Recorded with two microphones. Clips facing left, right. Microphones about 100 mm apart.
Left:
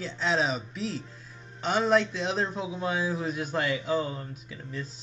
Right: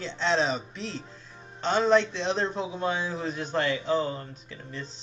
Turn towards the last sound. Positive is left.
turn(degrees=5)  # may be behind; listen again after turning